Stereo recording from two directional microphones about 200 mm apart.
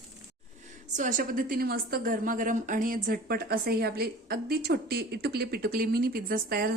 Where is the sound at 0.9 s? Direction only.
40° right (ahead or behind).